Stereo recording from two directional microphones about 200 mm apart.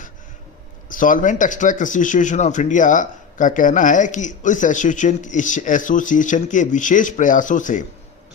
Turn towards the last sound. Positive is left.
turn(degrees=40)  # may be behind; listen again after turning